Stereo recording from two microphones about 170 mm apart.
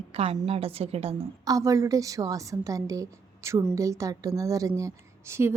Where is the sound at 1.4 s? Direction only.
20° right (ahead or behind).